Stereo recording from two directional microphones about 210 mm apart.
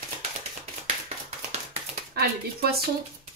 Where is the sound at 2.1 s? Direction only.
45° right (ahead or behind).